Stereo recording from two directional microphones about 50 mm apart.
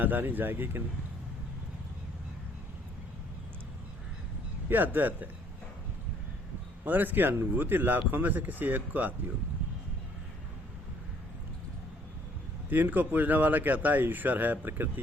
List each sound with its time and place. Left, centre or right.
0.0 s speech: right
4.7 s speech: right
6.8 s speech: right
12.7 s speech: right